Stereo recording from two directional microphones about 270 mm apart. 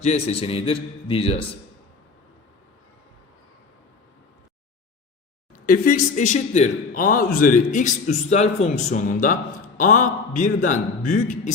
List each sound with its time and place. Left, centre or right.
0.0 s speech: left
5.5 s speech: left